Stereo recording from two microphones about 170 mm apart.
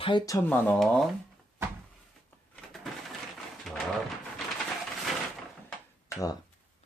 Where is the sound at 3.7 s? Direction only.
Centre (ahead or behind).